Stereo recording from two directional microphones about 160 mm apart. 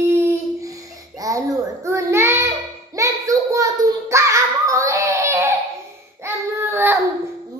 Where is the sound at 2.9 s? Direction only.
20° right (ahead or behind).